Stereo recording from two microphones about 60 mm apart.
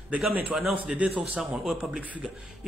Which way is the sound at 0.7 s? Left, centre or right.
Right.